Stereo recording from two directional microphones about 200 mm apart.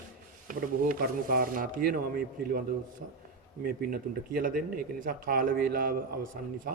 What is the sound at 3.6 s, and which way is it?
Speech, 45° right (ahead or behind).